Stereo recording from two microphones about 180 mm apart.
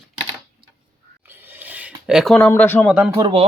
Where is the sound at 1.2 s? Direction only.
10° right (ahead or behind); by 2.9 s 10° left (ahead or behind).